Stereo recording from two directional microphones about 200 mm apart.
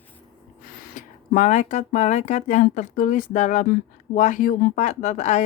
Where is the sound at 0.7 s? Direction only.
40° left (ahead or behind).